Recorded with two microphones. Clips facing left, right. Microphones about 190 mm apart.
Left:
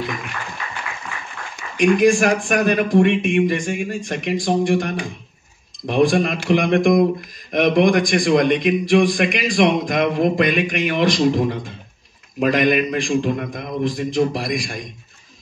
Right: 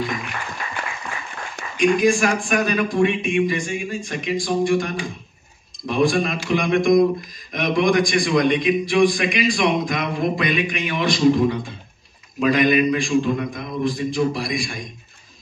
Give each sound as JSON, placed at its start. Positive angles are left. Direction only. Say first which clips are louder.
{"t": 1.8, "sound": "speech", "louder": "left 3 dB", "side_deg": 55}